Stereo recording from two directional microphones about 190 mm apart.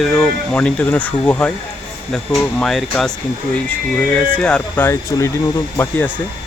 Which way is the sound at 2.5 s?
Centre (ahead or behind).